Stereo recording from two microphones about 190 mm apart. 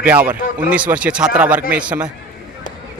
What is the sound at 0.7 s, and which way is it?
Speech, 5° right (ahead or behind).